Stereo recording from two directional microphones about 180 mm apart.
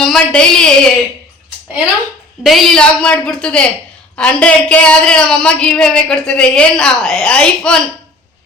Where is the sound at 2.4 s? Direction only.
Centre (ahead or behind).